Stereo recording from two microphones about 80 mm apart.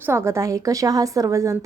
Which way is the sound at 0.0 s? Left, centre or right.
Right.